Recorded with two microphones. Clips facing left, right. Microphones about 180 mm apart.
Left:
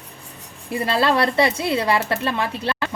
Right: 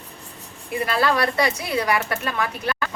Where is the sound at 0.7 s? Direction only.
25° left (ahead or behind).